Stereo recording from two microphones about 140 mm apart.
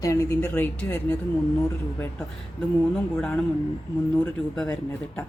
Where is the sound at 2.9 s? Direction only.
5° left (ahead or behind).